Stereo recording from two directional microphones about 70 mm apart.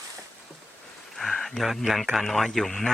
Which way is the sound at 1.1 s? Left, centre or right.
Centre.